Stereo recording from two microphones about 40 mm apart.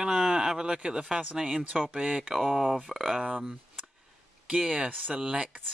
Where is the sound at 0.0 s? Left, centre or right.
Centre.